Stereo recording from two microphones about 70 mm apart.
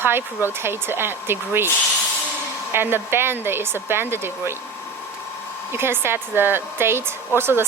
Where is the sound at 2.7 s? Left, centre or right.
Right.